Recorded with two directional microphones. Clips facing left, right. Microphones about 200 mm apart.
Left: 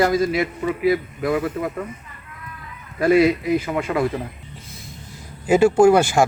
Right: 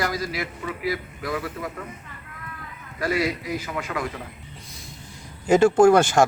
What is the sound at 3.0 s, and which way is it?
A man's voice, 25° left (ahead or behind).